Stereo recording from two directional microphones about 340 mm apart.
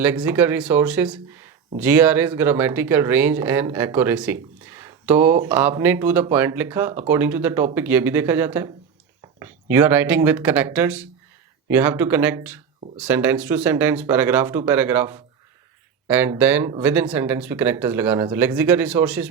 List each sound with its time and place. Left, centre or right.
0.0 s speech: centre